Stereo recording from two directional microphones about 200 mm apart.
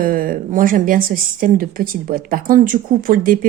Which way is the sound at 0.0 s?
45° right (ahead or behind).